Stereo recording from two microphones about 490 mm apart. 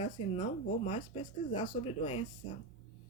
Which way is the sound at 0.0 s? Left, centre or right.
Centre.